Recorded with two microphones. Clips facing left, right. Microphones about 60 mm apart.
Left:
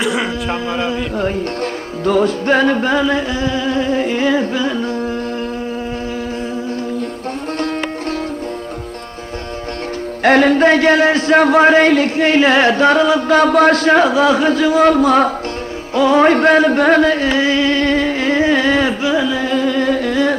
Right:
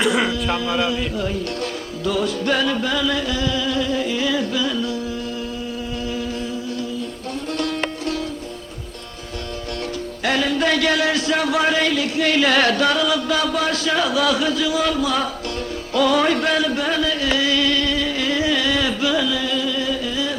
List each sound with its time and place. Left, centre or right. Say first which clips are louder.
0.0 s a sound: left 1 dB; centre
0.3 s a man's voice: left 2 dB; left
10.2 s a man's voice: left 9 dB; left
16.0 s music: left 6 dB; left